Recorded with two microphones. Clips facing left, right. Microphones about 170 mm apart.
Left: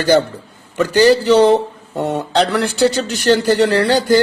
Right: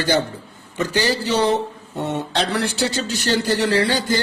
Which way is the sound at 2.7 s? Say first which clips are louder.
Left 7 dB; 55° left (ahead or behind).